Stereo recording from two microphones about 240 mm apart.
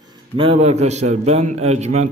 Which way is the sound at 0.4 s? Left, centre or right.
Right.